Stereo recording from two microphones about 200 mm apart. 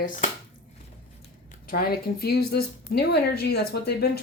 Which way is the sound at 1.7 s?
50° left (ahead or behind).